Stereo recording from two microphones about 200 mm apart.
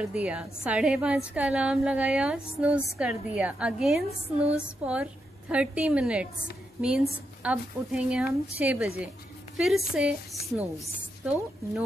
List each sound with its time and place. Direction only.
0.0 s a woman's voice: 5° right (ahead or behind)
11.2 s a woman's voice: 5° right (ahead or behind)